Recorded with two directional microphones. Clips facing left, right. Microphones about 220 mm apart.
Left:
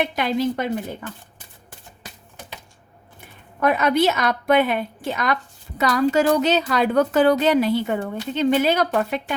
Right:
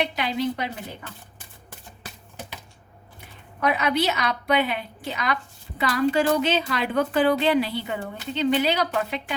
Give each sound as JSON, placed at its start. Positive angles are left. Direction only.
{"t": 0.2, "sound": "a woman's voice", "side_deg": 45}
{"t": 3.2, "sound": "a woman's voice", "side_deg": 50}